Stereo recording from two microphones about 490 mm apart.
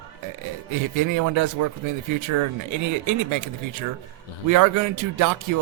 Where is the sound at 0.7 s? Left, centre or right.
Right.